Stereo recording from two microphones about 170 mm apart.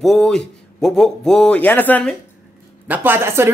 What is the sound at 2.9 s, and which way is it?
Speech, 10° right (ahead or behind).